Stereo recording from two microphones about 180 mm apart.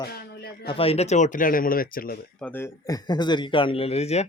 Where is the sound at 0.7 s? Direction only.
30° left (ahead or behind); by 2.2 s 55° left (ahead or behind).